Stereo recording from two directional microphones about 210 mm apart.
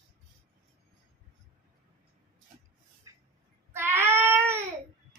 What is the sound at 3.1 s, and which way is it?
Music, 15° right (ahead or behind).